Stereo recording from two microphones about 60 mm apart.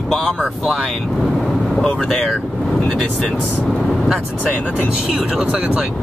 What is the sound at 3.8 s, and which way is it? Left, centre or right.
Vehicle, centre.